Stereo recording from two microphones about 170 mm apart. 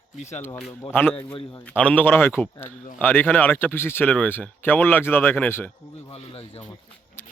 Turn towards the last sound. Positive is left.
turn(degrees=35)  # may be behind; listen again after turning